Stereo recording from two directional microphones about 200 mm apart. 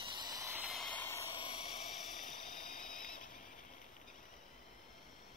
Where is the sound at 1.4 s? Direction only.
25° left (ahead or behind).